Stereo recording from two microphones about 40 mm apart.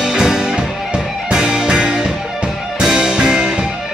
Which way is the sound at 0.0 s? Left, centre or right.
Centre.